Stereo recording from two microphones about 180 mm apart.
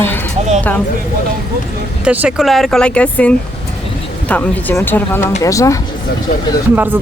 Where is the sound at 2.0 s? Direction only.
5° right (ahead or behind); by 5.8 s 20° left (ahead or behind).